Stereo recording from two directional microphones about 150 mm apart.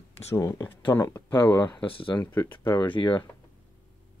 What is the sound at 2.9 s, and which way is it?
Speech, 35° left (ahead or behind).